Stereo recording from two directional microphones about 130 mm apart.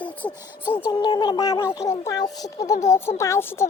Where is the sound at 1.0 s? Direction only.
35° left (ahead or behind).